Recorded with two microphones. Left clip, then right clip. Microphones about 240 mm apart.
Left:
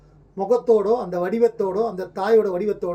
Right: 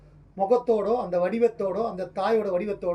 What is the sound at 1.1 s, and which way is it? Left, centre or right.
Speech, centre.